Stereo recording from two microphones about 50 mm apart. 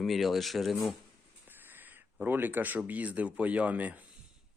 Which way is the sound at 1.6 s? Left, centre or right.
Right.